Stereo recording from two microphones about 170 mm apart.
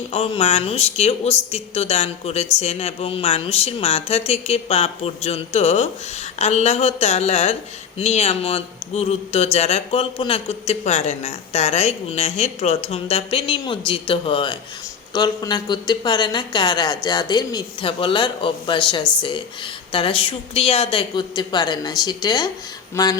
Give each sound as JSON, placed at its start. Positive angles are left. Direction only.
{"t": 0.1, "sound": "speech", "side_deg": 35}